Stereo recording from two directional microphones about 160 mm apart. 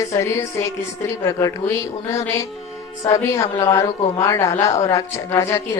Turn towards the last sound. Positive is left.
turn(degrees=15)  # may be behind; listen again after turning